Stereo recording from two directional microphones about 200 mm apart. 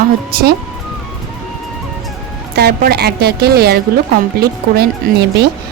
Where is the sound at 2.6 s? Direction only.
50° right (ahead or behind).